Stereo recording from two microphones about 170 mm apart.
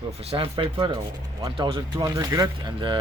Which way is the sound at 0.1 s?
35° right (ahead or behind).